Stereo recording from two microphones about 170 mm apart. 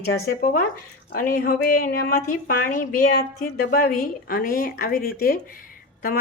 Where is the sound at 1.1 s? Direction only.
55° left (ahead or behind).